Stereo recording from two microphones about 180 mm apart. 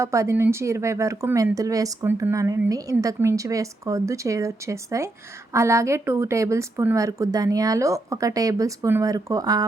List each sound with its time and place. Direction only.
0.0 s speech: 15° right (ahead or behind)